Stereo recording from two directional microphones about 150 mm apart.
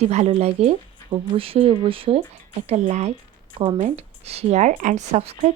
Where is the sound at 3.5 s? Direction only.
35° right (ahead or behind).